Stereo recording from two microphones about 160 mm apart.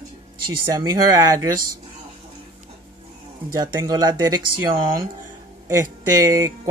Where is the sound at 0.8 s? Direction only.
25° right (ahead or behind).